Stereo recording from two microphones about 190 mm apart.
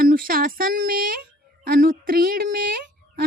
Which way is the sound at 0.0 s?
50° right (ahead or behind).